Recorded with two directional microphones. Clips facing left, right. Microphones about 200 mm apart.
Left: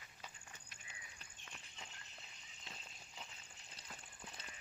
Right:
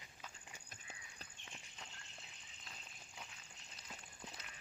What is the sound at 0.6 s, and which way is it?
Horse, 40° right (ahead or behind).